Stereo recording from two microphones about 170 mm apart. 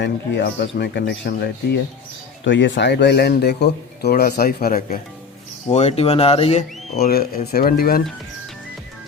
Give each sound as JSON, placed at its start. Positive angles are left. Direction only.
{"t": 0.0, "sound": "speech", "side_deg": 90}
{"t": 2.4, "sound": "speech", "side_deg": 90}
{"t": 5.6, "sound": "speech", "side_deg": 40}
{"t": 7.0, "sound": "speech", "side_deg": 65}